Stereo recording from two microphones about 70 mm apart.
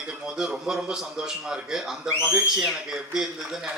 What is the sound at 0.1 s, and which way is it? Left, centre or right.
A man's voice, centre.